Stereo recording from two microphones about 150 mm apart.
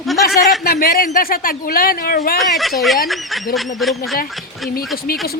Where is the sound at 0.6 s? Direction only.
85° left.